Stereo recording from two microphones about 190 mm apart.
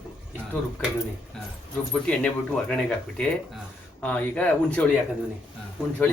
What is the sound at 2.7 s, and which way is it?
Speech, 5° left (ahead or behind).